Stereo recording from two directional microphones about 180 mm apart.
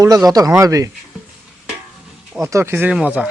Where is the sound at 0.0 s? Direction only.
20° right (ahead or behind).